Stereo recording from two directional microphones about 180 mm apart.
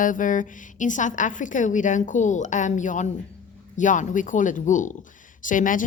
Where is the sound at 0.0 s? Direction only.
45° left (ahead or behind).